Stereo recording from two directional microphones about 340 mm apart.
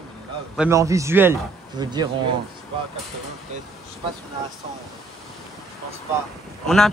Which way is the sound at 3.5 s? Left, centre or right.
Right.